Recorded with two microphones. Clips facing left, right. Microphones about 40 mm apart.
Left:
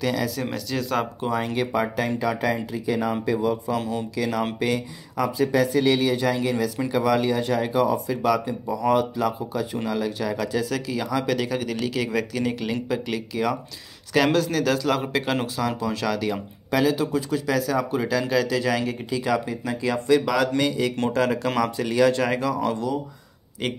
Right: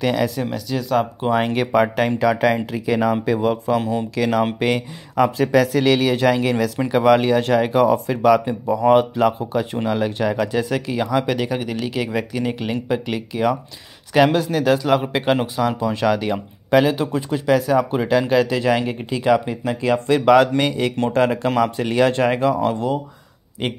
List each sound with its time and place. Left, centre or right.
0.0 s speech: right
0.5 s speech: centre
1.3 s speech: right
3.7 s speech: right
4.1 s speech: right
5.5 s speech: right
6.9 s speech: right